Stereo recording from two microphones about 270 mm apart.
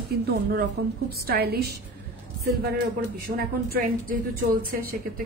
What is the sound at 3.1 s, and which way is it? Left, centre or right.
A woman's voice, right.